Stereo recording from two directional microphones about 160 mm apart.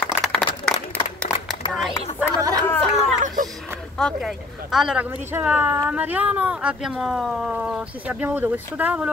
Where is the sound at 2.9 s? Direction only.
50° right (ahead or behind).